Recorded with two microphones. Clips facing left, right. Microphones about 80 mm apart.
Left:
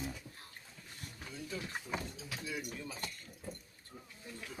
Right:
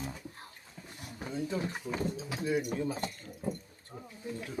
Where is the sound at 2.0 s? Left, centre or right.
Right.